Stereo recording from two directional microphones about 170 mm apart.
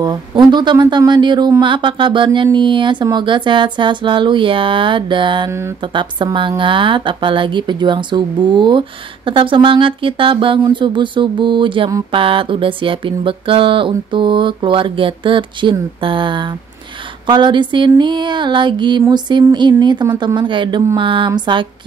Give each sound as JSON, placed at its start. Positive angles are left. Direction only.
{"t": 0.0, "sound": "a woman's voice", "side_deg": -25}
{"t": 12.1, "sound": "a sound", "side_deg": -30}
{"t": 17.3, "sound": "a woman's voice", "side_deg": -25}